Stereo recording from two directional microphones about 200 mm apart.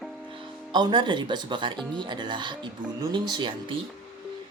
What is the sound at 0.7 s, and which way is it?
Speech, 25° right (ahead or behind).